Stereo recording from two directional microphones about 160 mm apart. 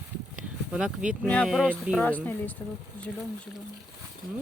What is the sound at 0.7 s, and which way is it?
Speech, 5° right (ahead or behind).